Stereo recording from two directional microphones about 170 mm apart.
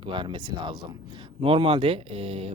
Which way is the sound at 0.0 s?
30° right (ahead or behind).